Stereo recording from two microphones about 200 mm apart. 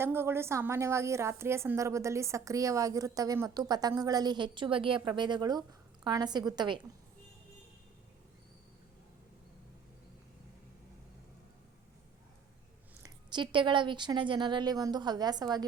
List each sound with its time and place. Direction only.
0.0 s a woman's voice: 10° right (ahead or behind)
13.0 s speech: 20° right (ahead or behind)